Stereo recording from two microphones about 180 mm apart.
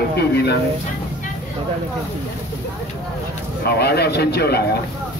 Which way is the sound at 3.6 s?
65° left (ahead or behind).